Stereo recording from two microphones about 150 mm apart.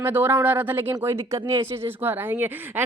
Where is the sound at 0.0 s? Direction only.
15° right (ahead or behind).